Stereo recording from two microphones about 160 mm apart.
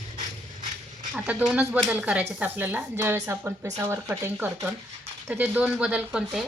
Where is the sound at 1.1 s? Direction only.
5° right (ahead or behind).